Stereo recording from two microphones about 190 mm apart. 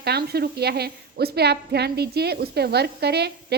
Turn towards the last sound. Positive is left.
turn(degrees=-60)  # may be behind; listen again after turning